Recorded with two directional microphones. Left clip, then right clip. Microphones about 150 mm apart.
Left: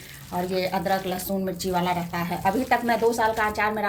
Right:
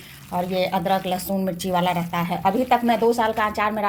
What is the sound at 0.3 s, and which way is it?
A woman's voice, 35° right (ahead or behind).